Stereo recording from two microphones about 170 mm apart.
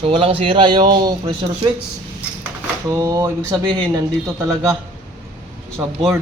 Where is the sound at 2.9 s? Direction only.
20° right (ahead or behind).